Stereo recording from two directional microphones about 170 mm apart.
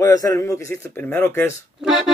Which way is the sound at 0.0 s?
20° left (ahead or behind).